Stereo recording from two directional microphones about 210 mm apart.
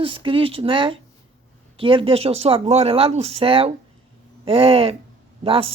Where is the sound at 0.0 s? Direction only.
25° right (ahead or behind).